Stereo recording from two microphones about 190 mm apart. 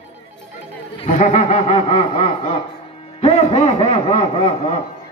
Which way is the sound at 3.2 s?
30° left (ahead or behind).